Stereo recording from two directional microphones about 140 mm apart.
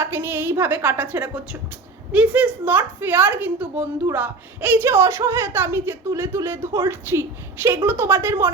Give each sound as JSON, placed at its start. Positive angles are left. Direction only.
{"t": 0.0, "sound": "a woman's voice", "side_deg": -15}